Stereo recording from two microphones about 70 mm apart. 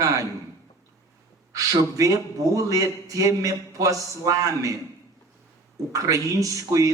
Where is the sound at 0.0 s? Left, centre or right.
Right.